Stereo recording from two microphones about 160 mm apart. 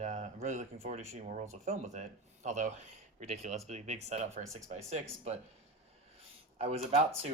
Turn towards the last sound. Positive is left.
turn(degrees=-45)  # may be behind; listen again after turning